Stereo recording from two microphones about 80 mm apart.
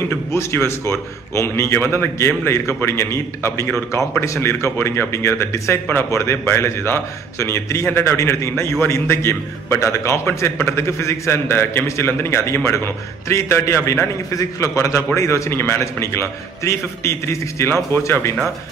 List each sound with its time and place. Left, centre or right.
0.1 s a man's voice: left